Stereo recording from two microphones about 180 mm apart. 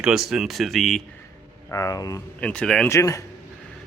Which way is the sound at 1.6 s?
15° left (ahead or behind).